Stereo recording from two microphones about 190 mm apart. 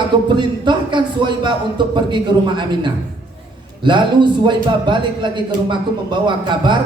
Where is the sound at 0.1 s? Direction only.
25° right (ahead or behind).